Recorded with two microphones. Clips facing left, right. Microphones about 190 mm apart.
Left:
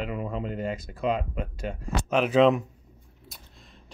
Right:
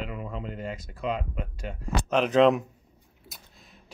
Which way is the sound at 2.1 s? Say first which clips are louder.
Even; 5° left (ahead or behind).